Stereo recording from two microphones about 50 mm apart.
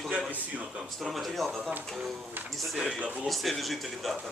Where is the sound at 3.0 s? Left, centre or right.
Right.